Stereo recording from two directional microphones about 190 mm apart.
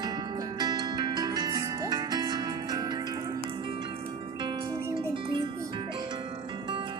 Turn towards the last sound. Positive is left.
turn(degrees=-25)  # may be behind; listen again after turning